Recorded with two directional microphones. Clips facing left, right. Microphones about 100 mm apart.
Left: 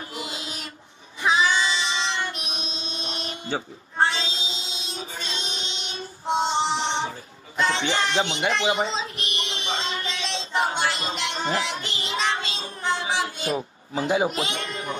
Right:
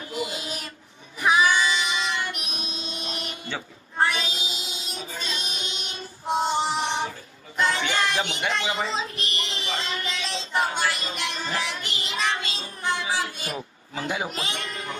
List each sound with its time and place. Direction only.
0.2 s mantra: 20° left (ahead or behind)
1.2 s child singing: 25° left (ahead or behind)
7.5 s a sound: 25° left (ahead or behind)
14.3 s speech: 20° left (ahead or behind)